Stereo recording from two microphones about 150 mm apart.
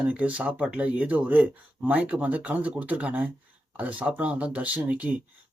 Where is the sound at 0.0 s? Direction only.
10° right (ahead or behind).